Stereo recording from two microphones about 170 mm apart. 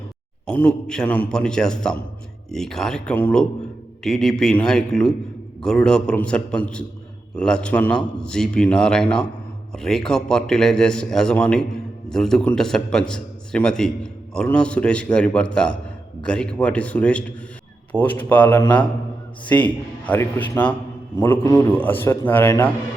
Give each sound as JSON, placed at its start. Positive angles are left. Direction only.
{"t": 0.5, "sound": "a man's voice", "side_deg": 5}